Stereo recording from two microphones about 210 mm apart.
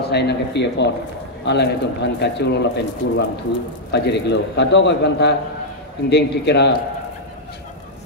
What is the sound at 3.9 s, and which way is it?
A man's voice, 55° left (ahead or behind).